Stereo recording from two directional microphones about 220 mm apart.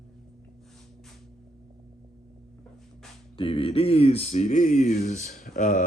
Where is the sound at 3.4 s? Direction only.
25° left (ahead or behind).